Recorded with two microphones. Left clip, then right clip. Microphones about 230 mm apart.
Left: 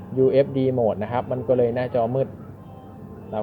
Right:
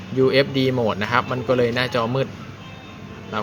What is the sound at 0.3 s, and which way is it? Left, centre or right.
A man's voice, right.